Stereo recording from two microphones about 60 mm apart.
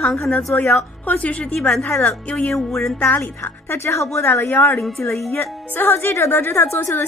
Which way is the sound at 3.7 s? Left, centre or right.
Left.